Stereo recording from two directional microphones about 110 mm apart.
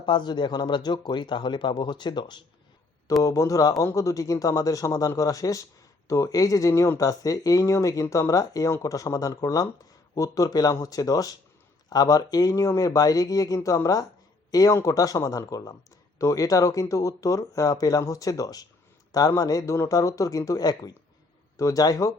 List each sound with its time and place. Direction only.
0.0 s speech: 45° left (ahead or behind)
3.2 s a man's voice: 30° left (ahead or behind)